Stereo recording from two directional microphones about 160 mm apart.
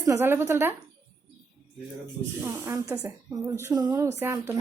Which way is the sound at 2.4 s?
15° right (ahead or behind).